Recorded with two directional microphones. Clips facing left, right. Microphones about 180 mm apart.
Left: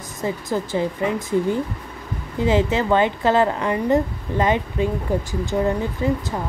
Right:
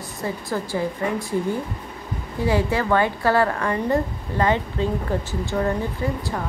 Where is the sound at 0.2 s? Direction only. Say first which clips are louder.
Left 3 dB; 20° left (ahead or behind).